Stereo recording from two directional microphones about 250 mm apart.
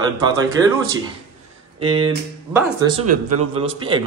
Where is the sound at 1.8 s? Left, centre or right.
Right.